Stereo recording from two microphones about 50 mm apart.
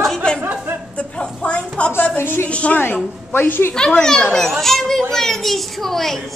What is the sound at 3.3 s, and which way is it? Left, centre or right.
Speech, left.